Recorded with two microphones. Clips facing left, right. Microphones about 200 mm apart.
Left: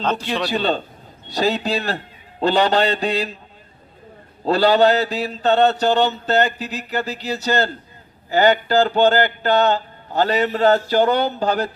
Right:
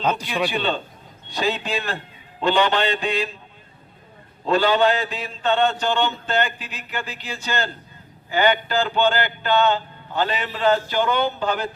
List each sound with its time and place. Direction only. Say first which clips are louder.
0.0 s a man's voice: left 1 dB; 10° right (ahead or behind)
0.5 s mantra: left 4 dB; 40° left (ahead or behind)
4.4 s mantra: left 4 dB; 35° left (ahead or behind)